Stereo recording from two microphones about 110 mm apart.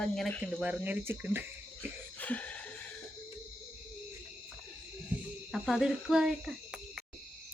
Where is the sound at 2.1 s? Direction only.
15° left (ahead or behind).